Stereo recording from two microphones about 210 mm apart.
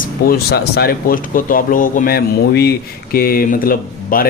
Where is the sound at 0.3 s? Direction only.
50° left (ahead or behind).